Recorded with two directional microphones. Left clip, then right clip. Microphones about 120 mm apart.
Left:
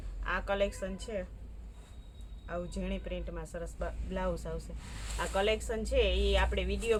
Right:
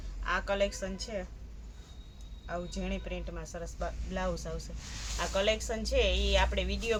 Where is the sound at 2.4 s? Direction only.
25° left (ahead or behind).